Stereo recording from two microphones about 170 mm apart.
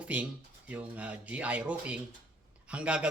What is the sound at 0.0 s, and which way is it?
Speech, 10° right (ahead or behind).